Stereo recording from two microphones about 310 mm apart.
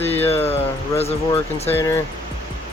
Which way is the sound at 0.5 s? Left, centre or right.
Centre.